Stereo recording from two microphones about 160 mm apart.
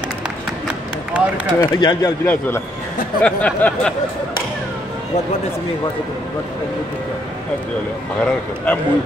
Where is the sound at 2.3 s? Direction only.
10° left (ahead or behind).